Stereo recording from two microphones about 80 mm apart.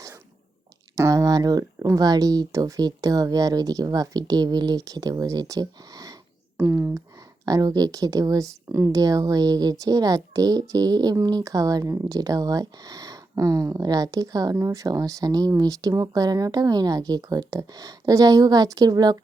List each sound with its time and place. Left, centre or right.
0.9 s a sound: right
1.9 s a child's voice: right
6.6 s speech: right
7.4 s a child's voice: right
8.9 s a child's voice: right